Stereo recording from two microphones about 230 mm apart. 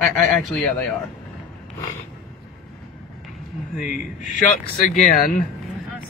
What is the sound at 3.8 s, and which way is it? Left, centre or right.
Speech, left.